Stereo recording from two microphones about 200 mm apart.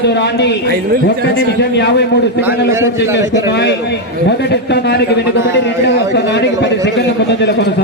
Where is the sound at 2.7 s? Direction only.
10° right (ahead or behind).